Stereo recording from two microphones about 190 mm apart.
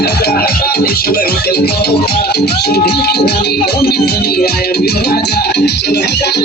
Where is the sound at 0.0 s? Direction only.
60° left (ahead or behind).